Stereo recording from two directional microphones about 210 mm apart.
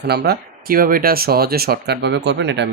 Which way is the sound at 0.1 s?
50° right (ahead or behind).